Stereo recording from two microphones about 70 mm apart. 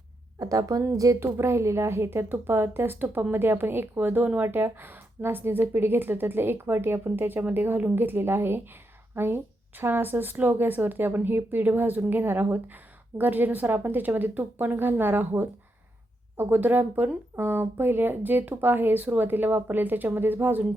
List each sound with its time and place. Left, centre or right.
0.3 s a woman's voice: right
1.2 s a woman's voice: right